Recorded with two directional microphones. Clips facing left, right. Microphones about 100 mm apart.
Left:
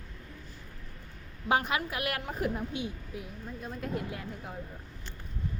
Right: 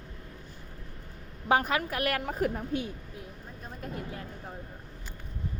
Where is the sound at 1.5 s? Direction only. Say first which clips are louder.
Right 2 dB; 40° right (ahead or behind).